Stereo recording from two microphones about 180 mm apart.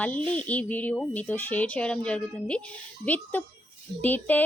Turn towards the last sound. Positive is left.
turn(degrees=10)  # may be behind; listen again after turning